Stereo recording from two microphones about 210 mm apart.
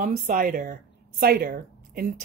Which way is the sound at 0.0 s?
40° right (ahead or behind).